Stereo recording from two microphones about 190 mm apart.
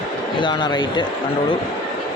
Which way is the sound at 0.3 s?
25° left (ahead or behind).